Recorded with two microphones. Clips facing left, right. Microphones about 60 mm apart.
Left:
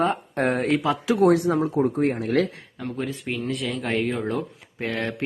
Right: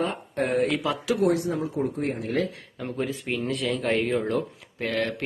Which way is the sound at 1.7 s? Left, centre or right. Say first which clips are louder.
Left 6 dB; left.